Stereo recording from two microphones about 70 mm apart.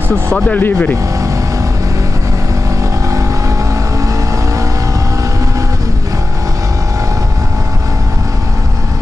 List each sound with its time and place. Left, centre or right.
0.5 s speech: left
3.1 s vehicle: right